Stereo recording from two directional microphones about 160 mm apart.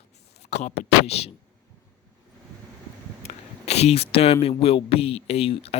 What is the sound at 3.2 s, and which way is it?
Speech, 40° left (ahead or behind).